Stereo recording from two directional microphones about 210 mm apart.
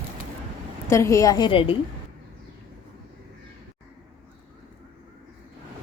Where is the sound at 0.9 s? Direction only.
15° left (ahead or behind).